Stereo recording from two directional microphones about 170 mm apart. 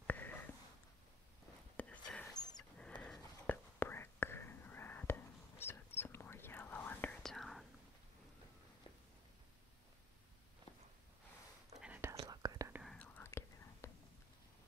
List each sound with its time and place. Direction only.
0.0 s a sound: 10° left (ahead or behind)
1.8 s whispering: 5° left (ahead or behind)
2.3 s a sound: 25° left (ahead or behind)
2.8 s whispering: 5° left (ahead or behind)
11.8 s whispering: 10° right (ahead or behind)
12.7 s whispering: centre (ahead or behind)